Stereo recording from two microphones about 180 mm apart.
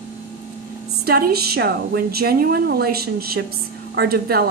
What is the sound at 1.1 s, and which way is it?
A woman's voice, 60° right (ahead or behind).